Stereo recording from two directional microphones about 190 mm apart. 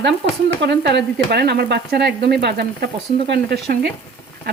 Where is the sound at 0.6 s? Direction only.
60° right (ahead or behind).